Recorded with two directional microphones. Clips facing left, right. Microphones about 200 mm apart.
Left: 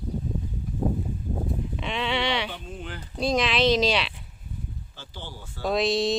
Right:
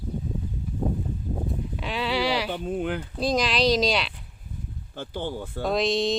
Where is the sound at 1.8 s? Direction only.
Centre (ahead or behind).